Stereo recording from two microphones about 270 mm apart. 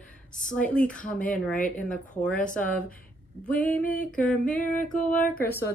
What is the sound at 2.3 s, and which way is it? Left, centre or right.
Speech, left.